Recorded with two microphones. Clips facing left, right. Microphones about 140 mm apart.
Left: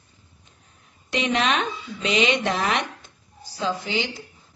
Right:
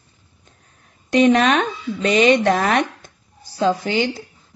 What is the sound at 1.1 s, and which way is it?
Speech, 45° right (ahead or behind).